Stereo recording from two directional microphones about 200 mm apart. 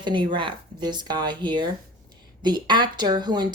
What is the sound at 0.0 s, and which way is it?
A woman's voice, 25° right (ahead or behind).